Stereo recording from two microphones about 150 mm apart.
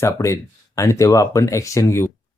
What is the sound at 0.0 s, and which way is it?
Speech, 20° left (ahead or behind).